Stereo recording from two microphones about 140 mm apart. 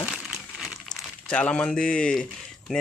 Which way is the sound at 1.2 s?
10° left (ahead or behind).